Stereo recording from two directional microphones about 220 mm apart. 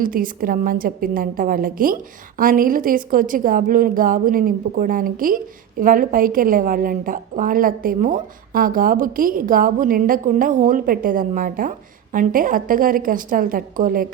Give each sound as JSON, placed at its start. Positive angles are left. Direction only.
{"t": 0.0, "sound": "a woman's voice", "side_deg": -40}